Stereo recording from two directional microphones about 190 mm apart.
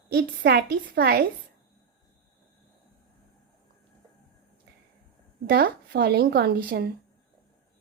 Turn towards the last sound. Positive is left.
turn(degrees=-55)  # may be behind; listen again after turning